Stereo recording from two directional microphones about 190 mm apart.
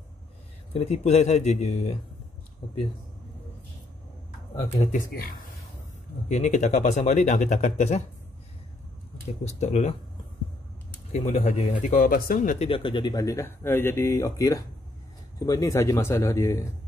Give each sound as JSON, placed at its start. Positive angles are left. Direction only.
{"t": 0.7, "sound": "speech", "side_deg": 35}
{"t": 4.9, "sound": "speech", "side_deg": 50}
{"t": 9.4, "sound": "speech", "side_deg": 35}
{"t": 11.1, "sound": "speech", "side_deg": 35}